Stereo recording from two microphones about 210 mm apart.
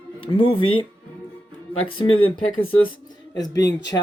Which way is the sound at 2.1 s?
75° left (ahead or behind).